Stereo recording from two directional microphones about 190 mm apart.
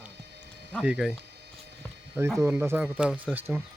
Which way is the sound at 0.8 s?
5° right (ahead or behind).